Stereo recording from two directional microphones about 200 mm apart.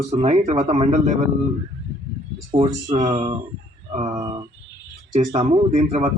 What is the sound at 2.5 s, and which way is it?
A man's voice, 30° right (ahead or behind).